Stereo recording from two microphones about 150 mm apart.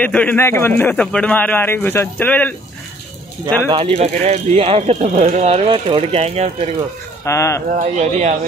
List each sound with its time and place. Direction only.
0.0 s a man's voice: 10° left (ahead or behind)
3.9 s speech: 45° right (ahead or behind)
7.2 s speech: 20° left (ahead or behind)
7.7 s speech: 50° right (ahead or behind)